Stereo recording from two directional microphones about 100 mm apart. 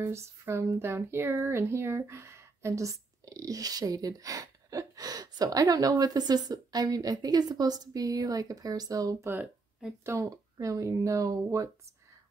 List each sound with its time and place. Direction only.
0.0 s speech: 25° right (ahead or behind)